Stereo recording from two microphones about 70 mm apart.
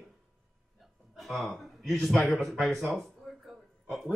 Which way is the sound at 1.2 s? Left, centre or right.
Centre.